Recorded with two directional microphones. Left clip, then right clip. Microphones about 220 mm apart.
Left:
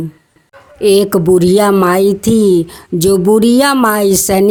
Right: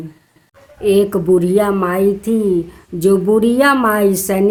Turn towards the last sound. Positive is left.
turn(degrees=45)  # may be behind; listen again after turning